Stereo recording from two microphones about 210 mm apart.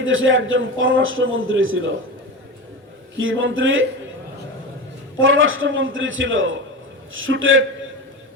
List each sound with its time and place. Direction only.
0.0 s a man's voice: 70° right (ahead or behind)
3.2 s a man's voice: 70° right (ahead or behind)
5.2 s a man's voice: 70° right (ahead or behind)